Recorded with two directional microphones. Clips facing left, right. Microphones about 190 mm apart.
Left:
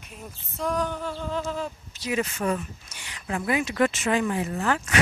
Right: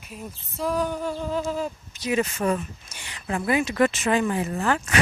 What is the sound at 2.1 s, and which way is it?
Speech, 30° right (ahead or behind).